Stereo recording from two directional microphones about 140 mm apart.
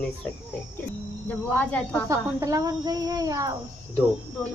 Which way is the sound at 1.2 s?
10° left (ahead or behind).